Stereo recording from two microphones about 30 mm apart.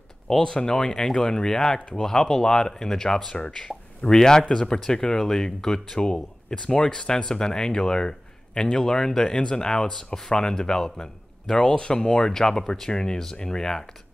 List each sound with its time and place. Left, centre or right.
0.4 s speech: left